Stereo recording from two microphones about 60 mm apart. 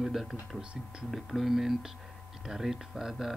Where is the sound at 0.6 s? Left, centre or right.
Centre.